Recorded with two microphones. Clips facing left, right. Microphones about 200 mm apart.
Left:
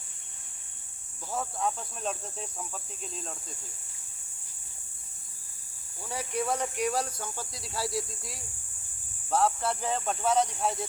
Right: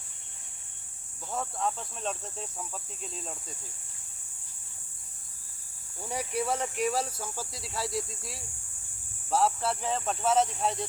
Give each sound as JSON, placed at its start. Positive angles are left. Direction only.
{"t": 1.3, "sound": "speech", "side_deg": 0}
{"t": 6.0, "sound": "speech", "side_deg": -20}
{"t": 6.3, "sound": "speech", "side_deg": -5}